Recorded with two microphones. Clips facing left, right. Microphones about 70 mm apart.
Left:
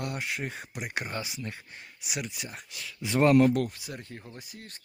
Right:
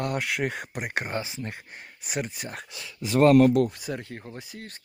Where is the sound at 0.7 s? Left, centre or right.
Right.